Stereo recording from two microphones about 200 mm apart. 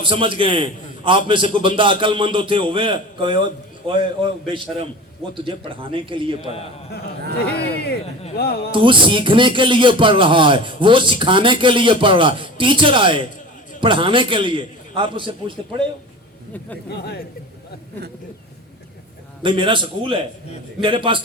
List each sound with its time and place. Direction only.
0.0 s speech: 25° right (ahead or behind)
7.3 s speech: 55° left (ahead or behind)
8.7 s speech: 25° right (ahead or behind)
16.9 s speech: 55° left (ahead or behind)
19.4 s speech: 25° right (ahead or behind)